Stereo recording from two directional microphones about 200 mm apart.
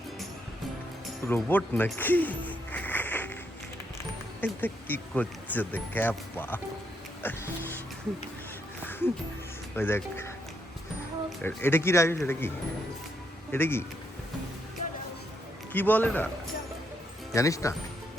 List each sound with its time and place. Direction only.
1.2 s music: 10° left (ahead or behind)
4.4 s speech: 10° left (ahead or behind)
9.7 s speech: 10° left (ahead or behind)
11.4 s speech: 10° left (ahead or behind)
13.5 s speech: 10° left (ahead or behind)
15.7 s speech: 10° left (ahead or behind)
17.3 s speech: 15° left (ahead or behind)